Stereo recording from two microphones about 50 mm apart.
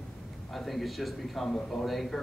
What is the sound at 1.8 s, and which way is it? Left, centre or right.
Speech, centre.